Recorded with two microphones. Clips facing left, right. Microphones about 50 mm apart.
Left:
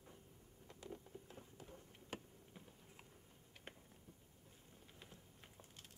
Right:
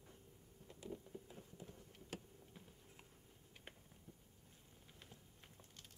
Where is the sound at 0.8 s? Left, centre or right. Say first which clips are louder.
Right 3 dB; centre.